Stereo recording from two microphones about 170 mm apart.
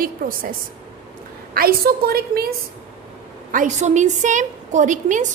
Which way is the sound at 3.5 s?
45° right (ahead or behind).